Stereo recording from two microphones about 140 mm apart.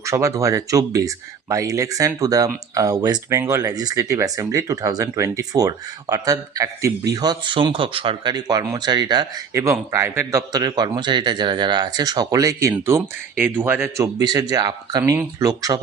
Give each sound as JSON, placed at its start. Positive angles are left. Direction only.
{"t": 0.0, "sound": "speech", "side_deg": -20}